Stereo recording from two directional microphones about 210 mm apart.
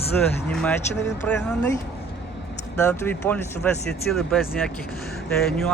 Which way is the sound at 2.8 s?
10° left (ahead or behind).